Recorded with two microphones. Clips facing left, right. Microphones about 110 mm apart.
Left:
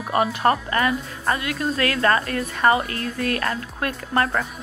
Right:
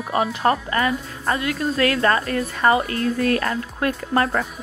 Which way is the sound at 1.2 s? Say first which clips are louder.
Right 1 dB; 30° right (ahead or behind).